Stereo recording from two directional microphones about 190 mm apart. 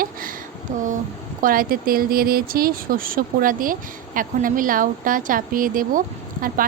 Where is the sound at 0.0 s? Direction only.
50° right (ahead or behind).